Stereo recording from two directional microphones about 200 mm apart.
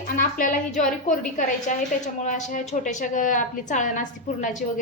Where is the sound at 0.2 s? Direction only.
45° left (ahead or behind).